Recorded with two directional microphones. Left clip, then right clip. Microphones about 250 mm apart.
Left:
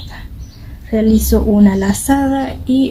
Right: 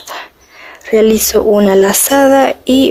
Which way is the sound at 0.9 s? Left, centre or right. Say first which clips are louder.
Right 6 dB; right.